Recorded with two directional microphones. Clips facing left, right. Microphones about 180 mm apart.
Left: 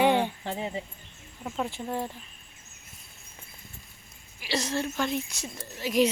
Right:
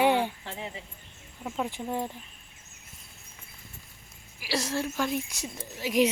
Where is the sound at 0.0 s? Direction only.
5° right (ahead or behind).